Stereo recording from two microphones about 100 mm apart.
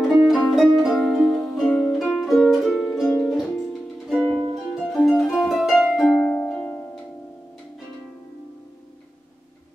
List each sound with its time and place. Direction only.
0.0 s music: centre (ahead or behind)
4.7 s harp: centre (ahead or behind)
6.3 s music: 15° left (ahead or behind)